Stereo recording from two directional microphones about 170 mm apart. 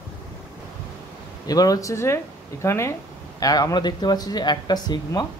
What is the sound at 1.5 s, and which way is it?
Speech, 20° left (ahead or behind).